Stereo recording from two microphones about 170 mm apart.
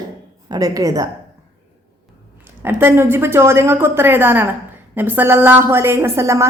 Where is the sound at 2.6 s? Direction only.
10° right (ahead or behind).